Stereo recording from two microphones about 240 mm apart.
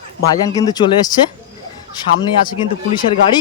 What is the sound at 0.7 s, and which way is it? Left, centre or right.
Speech, centre.